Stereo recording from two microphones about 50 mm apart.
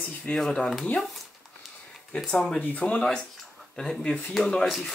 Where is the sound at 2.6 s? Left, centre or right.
Left.